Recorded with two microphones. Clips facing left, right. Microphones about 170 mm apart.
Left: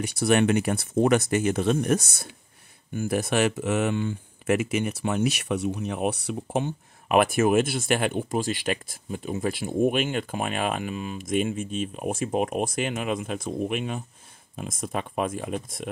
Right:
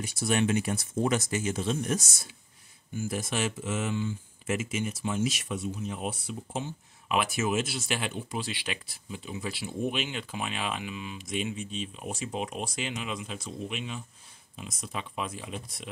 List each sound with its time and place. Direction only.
0.0 s speech: 65° left (ahead or behind); by 15.9 s 50° left (ahead or behind)